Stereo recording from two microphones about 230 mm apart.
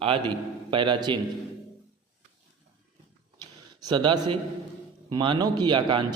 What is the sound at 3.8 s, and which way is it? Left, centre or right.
A man's voice, centre.